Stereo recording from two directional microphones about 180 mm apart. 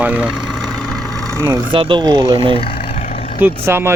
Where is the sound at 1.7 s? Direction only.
30° right (ahead or behind).